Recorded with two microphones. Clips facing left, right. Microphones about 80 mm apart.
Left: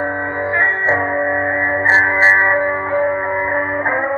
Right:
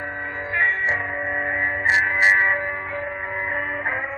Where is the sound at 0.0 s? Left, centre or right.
Left.